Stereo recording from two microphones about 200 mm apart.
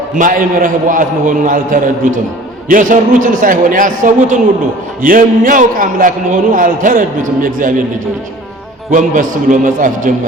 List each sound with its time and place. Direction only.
0.2 s a man's voice: 40° right (ahead or behind)
8.9 s a man's voice: 40° right (ahead or behind)